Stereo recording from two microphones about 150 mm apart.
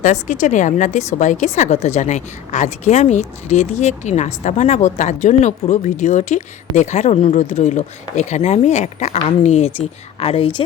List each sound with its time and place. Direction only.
0.0 s a woman's voice: 55° left (ahead or behind)